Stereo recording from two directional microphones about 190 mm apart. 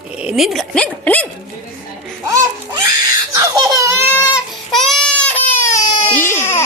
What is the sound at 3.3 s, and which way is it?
Baby cry, 15° right (ahead or behind).